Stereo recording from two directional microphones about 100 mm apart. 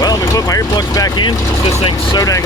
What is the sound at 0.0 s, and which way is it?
Vehicle, 35° left (ahead or behind).